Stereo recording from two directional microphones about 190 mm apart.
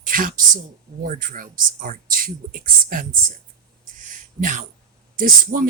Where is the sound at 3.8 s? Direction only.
45° right (ahead or behind).